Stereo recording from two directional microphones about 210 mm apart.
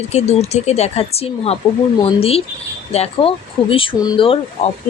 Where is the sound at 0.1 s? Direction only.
30° left (ahead or behind).